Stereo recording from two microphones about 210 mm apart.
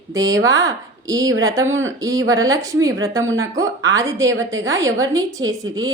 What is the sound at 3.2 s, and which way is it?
Speech, 70° right (ahead or behind).